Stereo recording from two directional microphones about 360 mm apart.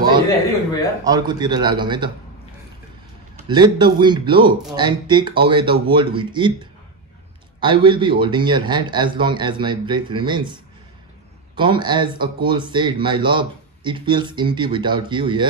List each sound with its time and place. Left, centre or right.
1.0 s speech: centre
3.4 s speech: centre